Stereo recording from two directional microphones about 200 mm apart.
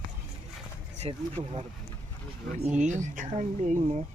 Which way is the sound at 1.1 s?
30° right (ahead or behind).